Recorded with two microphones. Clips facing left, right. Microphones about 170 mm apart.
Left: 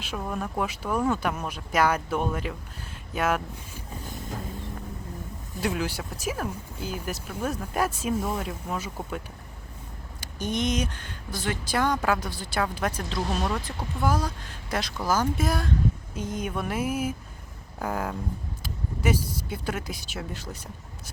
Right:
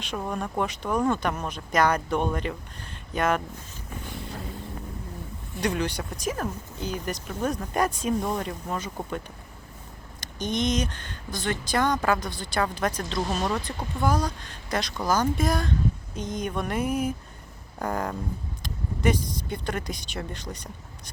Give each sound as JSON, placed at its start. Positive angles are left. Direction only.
{"t": 0.3, "sound": "speech", "side_deg": 5}
{"t": 5.5, "sound": "speech", "side_deg": 5}